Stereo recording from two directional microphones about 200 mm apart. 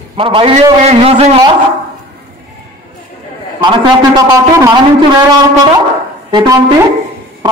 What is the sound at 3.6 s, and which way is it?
A man's voice, 20° right (ahead or behind).